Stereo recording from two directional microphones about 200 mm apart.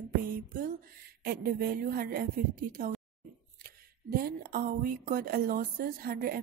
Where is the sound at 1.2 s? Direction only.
45° right (ahead or behind).